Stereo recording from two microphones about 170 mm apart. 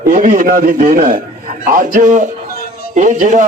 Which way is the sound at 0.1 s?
50° right (ahead or behind).